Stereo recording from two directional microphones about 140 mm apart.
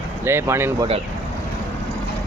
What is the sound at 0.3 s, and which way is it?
Speech, 15° right (ahead or behind).